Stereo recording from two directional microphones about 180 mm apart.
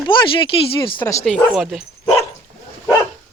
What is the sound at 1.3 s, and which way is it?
Speech, 5° left (ahead or behind).